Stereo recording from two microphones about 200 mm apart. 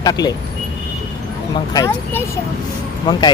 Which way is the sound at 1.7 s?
15° left (ahead or behind).